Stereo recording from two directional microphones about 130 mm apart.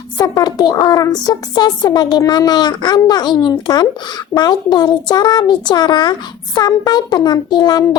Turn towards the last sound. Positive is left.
turn(degrees=35)  # may be behind; listen again after turning